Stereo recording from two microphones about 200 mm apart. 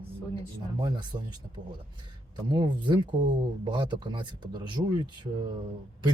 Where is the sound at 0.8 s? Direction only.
20° right (ahead or behind).